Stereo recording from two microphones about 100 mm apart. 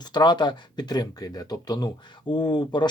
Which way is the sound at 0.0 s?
45° left (ahead or behind).